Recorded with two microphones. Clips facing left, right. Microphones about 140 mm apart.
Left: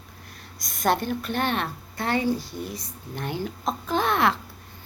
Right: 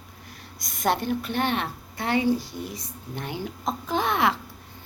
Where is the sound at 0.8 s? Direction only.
15° right (ahead or behind).